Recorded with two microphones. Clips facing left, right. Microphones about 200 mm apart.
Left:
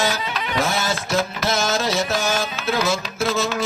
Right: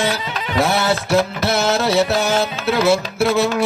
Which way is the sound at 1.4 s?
65° right (ahead or behind).